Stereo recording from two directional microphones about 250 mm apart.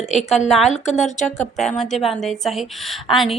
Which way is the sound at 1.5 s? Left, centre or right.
Centre.